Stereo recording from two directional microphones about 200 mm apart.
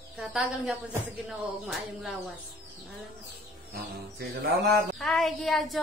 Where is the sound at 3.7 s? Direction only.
50° right (ahead or behind).